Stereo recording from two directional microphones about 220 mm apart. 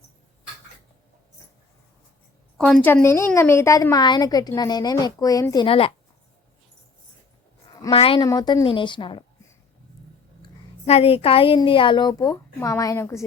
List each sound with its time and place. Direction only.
2.6 s a woman's voice: 5° left (ahead or behind); by 5.9 s 25° left (ahead or behind)
7.8 s a woman's voice: 20° left (ahead or behind)
10.8 s a woman's voice: 25° left (ahead or behind)